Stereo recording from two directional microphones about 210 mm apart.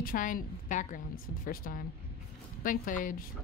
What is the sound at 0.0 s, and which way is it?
A woman's voice, 40° left (ahead or behind).